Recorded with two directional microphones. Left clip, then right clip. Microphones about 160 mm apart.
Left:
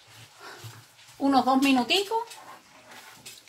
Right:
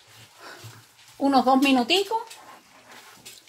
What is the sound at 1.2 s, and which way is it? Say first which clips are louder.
Speech: right 3 dB; 60° right (ahead or behind).